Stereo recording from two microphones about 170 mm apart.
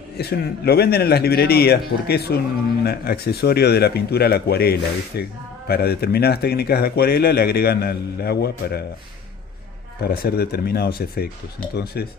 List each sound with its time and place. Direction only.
0.2 s speech: 70° left (ahead or behind)
10.0 s speech: 65° left (ahead or behind)